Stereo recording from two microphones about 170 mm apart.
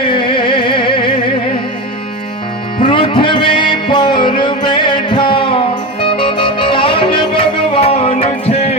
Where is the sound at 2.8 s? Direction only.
30° left (ahead or behind).